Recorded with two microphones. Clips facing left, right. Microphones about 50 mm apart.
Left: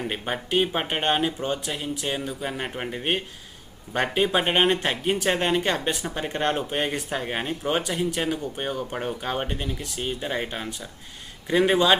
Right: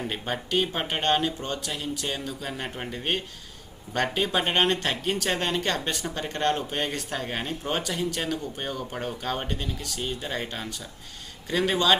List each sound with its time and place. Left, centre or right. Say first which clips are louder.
0.0 s speech: left 2 dB; centre